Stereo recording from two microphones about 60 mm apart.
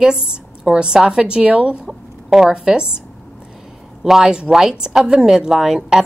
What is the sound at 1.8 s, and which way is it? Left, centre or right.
Speech, centre.